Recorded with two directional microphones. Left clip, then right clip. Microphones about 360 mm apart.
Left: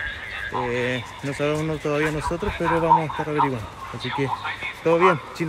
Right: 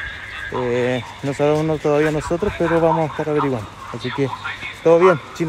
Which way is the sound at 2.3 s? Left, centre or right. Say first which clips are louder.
Right 5 dB; centre.